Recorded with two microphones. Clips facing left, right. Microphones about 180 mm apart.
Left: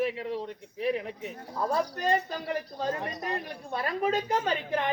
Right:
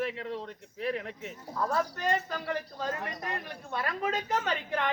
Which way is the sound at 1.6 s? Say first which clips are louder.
Left 2 dB; 30° left (ahead or behind).